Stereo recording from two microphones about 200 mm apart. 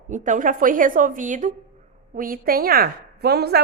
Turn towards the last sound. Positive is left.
turn(degrees=-55)  # may be behind; listen again after turning